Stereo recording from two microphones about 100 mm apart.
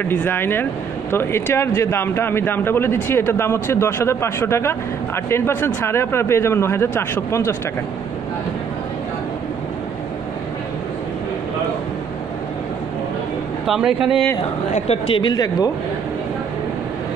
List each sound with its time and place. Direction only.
0.0 s a man's voice: 20° left (ahead or behind)
13.7 s a man's voice: 5° right (ahead or behind)
14.9 s a woman's voice: 60° left (ahead or behind)
15.3 s speech: 40° left (ahead or behind)